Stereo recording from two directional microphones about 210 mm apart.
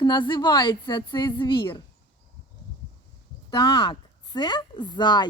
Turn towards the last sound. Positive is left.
turn(degrees=20)  # may be behind; listen again after turning